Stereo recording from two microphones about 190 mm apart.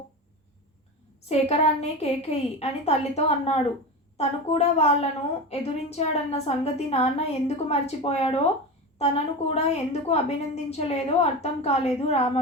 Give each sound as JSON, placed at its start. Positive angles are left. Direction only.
{"t": 1.3, "sound": "a woman's voice", "side_deg": 35}